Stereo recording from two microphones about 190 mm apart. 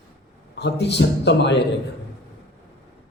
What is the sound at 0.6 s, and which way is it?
A man's voice, 60° left (ahead or behind).